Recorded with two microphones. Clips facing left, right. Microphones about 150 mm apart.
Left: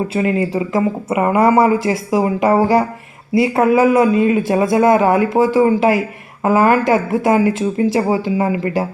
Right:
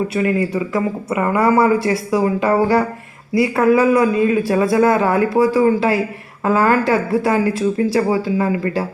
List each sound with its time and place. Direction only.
0.1 s speech: 25° left (ahead or behind)